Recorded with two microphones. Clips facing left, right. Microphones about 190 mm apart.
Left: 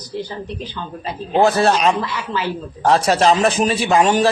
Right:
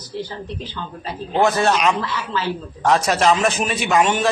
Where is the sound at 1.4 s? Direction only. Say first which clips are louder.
Left 2 dB; 35° left (ahead or behind).